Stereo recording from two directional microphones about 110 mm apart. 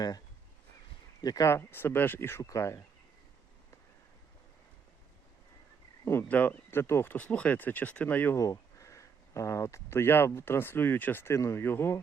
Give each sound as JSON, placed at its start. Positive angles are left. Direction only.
{"t": 1.2, "sound": "speech", "side_deg": 35}
{"t": 6.1, "sound": "speech", "side_deg": 15}
{"t": 8.4, "sound": "speech", "side_deg": 30}